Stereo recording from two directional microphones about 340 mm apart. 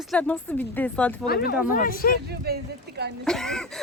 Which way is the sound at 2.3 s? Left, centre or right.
Right.